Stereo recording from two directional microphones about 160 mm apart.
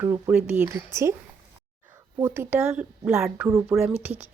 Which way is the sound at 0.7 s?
20° right (ahead or behind).